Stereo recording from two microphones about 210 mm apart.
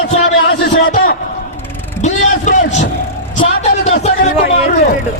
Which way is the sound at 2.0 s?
35° left (ahead or behind).